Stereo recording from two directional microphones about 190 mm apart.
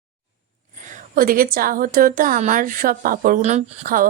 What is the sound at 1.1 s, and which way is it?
A woman's voice, 50° right (ahead or behind).